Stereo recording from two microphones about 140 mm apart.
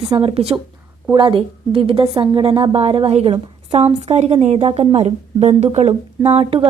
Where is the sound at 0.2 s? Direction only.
40° right (ahead or behind).